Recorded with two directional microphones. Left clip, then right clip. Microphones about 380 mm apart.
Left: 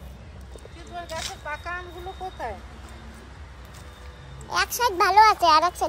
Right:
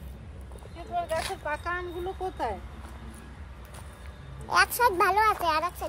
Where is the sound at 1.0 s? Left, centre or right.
Centre.